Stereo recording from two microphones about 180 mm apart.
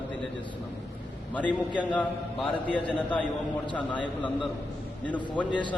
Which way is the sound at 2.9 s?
10° left (ahead or behind).